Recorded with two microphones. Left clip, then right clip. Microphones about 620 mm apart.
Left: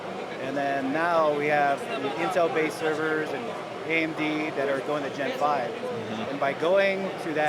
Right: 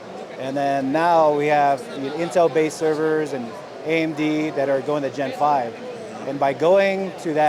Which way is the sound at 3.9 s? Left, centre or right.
Right.